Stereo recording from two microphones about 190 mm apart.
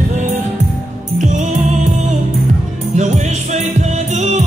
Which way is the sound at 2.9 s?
35° right (ahead or behind).